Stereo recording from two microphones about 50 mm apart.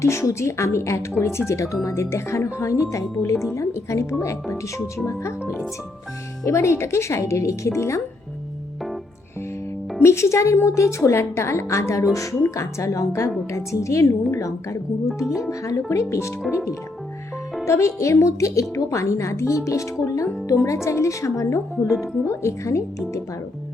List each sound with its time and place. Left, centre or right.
0.0 s a woman's voice: left
2.0 s a woman's voice: left
3.4 s speech: left
6.4 s a woman's voice: left
10.0 s a woman's voice: left
15.9 s a woman's voice: left
17.7 s speech: left
18.7 s speech: left